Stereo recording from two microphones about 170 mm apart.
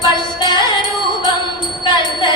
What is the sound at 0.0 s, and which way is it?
Music, 25° left (ahead or behind).